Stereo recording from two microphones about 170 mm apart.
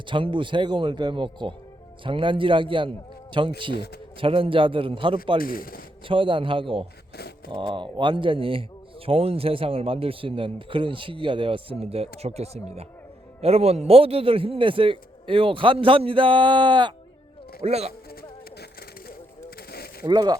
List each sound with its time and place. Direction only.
0.0 s a man's voice: 30° right (ahead or behind)
5.4 s speech: 55° left (ahead or behind)
6.1 s a man's voice: 30° right (ahead or behind)
7.2 s a sound: 65° left (ahead or behind)
7.5 s a man's voice: 30° right (ahead or behind)
17.6 s a man's voice: 40° right (ahead or behind)
18.1 s a sound: 65° left (ahead or behind)
20.1 s a man's voice: 25° right (ahead or behind)